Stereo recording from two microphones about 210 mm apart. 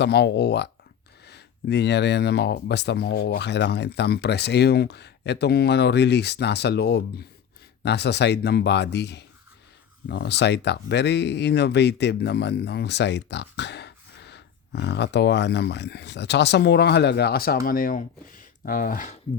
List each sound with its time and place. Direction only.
0.0 s speech: 50° left (ahead or behind)